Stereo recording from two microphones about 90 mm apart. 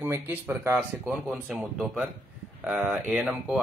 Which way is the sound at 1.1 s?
5° right (ahead or behind).